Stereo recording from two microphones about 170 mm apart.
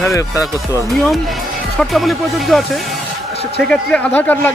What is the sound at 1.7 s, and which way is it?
Speech, centre (ahead or behind).